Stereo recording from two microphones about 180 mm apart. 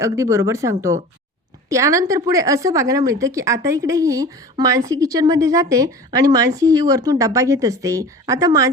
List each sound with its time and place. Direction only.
0.0 s a woman's voice: 15° right (ahead or behind)